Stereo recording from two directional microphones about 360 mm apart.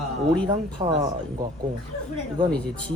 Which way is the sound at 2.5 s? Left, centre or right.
Centre.